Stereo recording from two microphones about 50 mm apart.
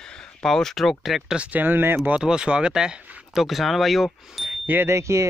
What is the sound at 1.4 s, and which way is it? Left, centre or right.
Speech, right.